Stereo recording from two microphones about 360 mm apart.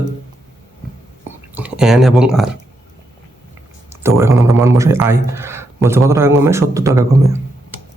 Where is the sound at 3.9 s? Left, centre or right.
Centre.